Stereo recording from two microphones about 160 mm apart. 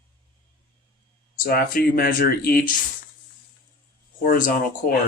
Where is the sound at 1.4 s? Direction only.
65° left (ahead or behind).